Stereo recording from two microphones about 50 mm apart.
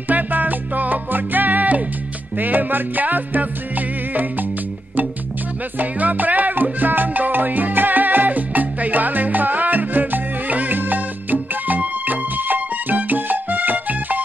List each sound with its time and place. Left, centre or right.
0.1 s music: right
5.8 s music: right